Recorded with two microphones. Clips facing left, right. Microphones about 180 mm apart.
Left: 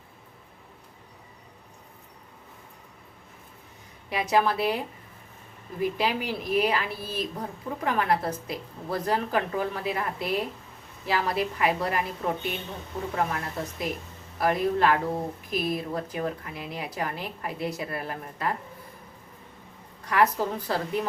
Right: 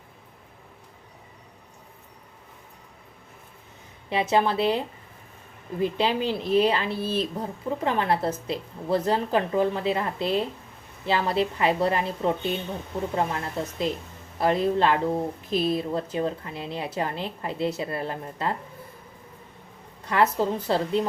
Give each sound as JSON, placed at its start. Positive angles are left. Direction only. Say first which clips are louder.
{"t": 4.1, "sound": "speech", "louder": "right 2 dB", "side_deg": -25}
{"t": 5.8, "sound": "speech", "louder": "right 3 dB", "side_deg": -25}
{"t": 20.1, "sound": "speech", "louder": "right 1 dB", "side_deg": -25}